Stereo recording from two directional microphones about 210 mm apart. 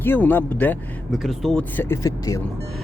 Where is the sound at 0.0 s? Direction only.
10° left (ahead or behind).